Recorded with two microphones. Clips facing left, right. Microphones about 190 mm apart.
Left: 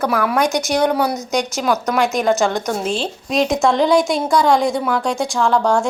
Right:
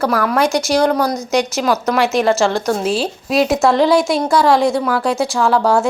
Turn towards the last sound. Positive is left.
turn(degrees=-5)  # may be behind; listen again after turning